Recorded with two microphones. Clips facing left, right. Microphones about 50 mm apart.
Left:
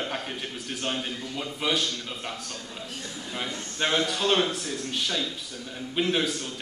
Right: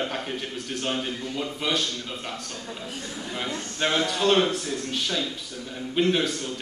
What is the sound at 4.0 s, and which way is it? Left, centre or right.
A man's voice, centre.